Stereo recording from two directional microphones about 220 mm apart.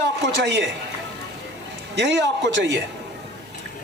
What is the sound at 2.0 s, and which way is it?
Speech, 55° right (ahead or behind).